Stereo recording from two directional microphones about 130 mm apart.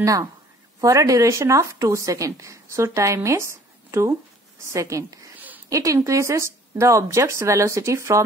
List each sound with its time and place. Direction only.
0.0 s speech: 25° right (ahead or behind)